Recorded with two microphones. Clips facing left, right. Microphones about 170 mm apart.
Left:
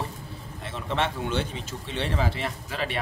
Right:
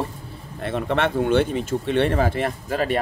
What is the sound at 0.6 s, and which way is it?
A man's voice, 60° right (ahead or behind).